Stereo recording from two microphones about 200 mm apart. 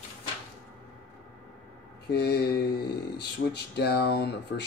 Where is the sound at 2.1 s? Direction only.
55° left (ahead or behind).